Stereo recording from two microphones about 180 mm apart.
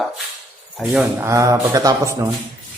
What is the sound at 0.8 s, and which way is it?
Speech, 10° right (ahead or behind).